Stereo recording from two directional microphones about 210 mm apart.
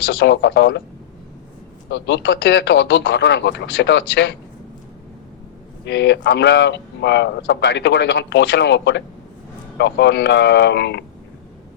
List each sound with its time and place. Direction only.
0.0 s a man's voice: 65° left (ahead or behind)
1.9 s a man's voice: 60° left (ahead or behind)
5.8 s a man's voice: 55° left (ahead or behind)